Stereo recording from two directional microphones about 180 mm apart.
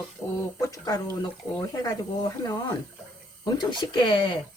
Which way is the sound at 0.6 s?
20° left (ahead or behind).